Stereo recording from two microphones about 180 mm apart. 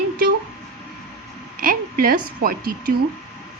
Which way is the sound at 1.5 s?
55° right (ahead or behind).